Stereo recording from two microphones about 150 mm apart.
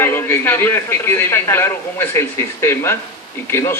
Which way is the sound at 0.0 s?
15° left (ahead or behind).